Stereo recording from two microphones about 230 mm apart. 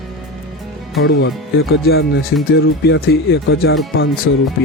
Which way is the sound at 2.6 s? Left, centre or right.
Left.